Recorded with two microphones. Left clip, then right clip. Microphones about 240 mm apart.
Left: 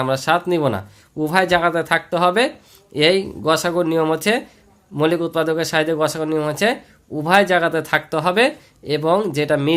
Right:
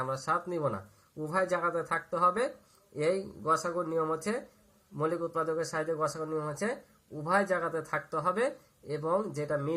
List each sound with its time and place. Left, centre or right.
0.0 s speech: left